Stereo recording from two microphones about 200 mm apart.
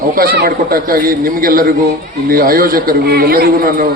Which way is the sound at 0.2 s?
50° right (ahead or behind).